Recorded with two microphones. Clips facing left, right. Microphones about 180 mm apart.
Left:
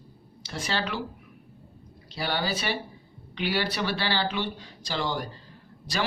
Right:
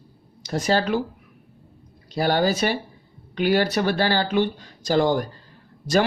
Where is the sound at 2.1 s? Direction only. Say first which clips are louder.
Right 9 dB; 45° right (ahead or behind).